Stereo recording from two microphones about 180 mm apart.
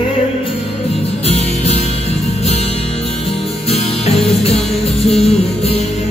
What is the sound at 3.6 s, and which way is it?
Music, 35° left (ahead or behind).